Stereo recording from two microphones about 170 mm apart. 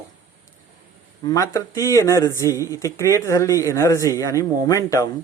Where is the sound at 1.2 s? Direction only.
20° left (ahead or behind).